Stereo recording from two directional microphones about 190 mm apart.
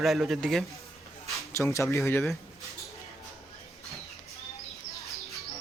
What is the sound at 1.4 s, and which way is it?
Speech, 15° left (ahead or behind).